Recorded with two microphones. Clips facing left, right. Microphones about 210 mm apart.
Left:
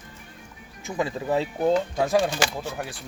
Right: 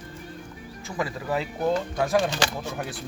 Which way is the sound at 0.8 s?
20° left (ahead or behind).